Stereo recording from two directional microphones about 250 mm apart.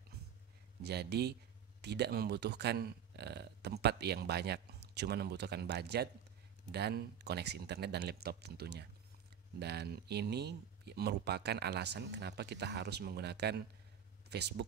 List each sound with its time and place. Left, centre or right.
0.8 s speech: right